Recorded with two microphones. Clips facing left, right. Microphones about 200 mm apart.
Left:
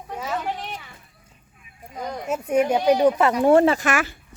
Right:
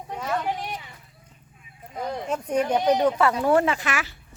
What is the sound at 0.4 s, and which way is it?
Children playing, 15° right (ahead or behind).